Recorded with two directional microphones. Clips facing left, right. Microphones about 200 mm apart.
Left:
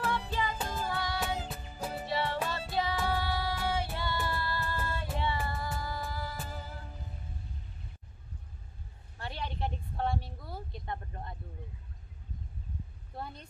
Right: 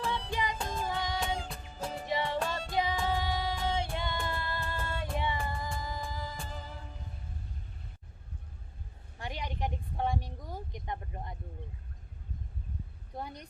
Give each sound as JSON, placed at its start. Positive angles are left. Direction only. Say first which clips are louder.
{"t": 0.3, "sound": "music", "louder": "even", "side_deg": -15}
{"t": 0.6, "sound": "music", "louder": "even", "side_deg": 5}
{"t": 0.9, "sound": "music", "louder": "right 1 dB", "side_deg": -15}
{"t": 1.2, "sound": "music", "louder": "even", "side_deg": 5}
{"t": 2.0, "sound": "music", "louder": "right 1 dB", "side_deg": -15}
{"t": 6.3, "sound": "music", "louder": "left 1 dB", "side_deg": 5}
{"t": 9.1, "sound": "a sound", "louder": "even", "side_deg": -15}
{"t": 13.1, "sound": "a woman's voice", "louder": "right 2 dB", "side_deg": -15}